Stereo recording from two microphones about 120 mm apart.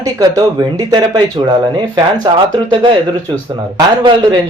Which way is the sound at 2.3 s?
35° right (ahead or behind).